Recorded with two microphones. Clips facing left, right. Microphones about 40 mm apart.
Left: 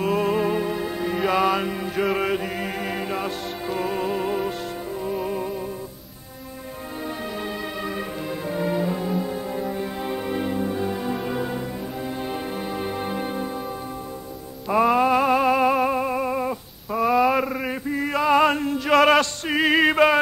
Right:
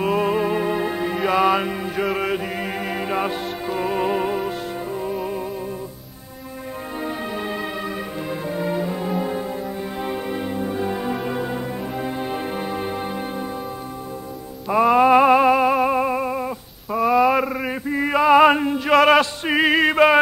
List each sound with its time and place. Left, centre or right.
0.0 s music: centre
3.1 s music: centre
4.0 s music: right
4.3 s music: centre
7.1 s music: centre
9.0 s music: centre
9.5 s music: centre
14.7 s music: centre
15.0 s music: centre
18.9 s a sound: centre
19.4 s music: centre
19.7 s male singing: centre